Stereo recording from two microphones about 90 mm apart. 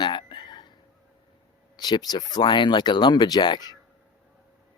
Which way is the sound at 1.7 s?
50° left (ahead or behind).